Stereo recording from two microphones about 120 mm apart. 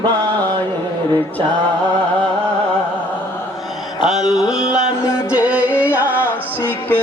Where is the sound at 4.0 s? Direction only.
5° right (ahead or behind).